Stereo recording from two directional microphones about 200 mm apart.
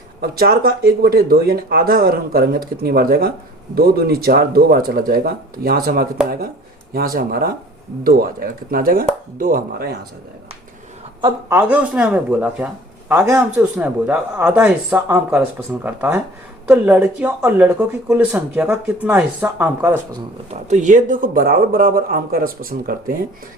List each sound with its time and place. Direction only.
0.2 s speech: 50° right (ahead or behind)
8.7 s speech: 45° right (ahead or behind)
11.5 s speech: 5° right (ahead or behind)
20.5 s speech: 35° right (ahead or behind)